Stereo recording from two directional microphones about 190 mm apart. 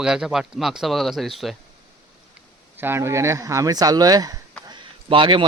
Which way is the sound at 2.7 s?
10° right (ahead or behind).